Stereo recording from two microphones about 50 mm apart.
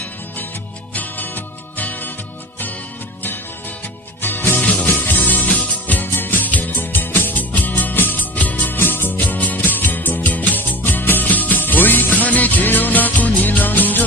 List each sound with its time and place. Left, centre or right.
0.9 s music: left
4.2 s music: left
4.6 s music: left
4.9 s music: left
8.8 s music: left